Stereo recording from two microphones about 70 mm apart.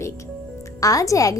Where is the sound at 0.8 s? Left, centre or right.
Left.